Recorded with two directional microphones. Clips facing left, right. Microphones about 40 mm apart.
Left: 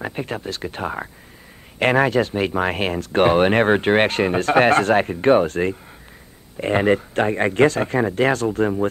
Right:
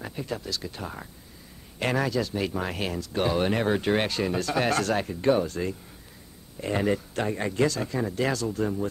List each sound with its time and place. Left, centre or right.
0.0 s speech: left